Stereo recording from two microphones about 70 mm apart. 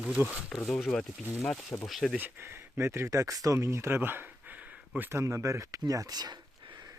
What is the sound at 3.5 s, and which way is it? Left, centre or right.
A man's voice, right.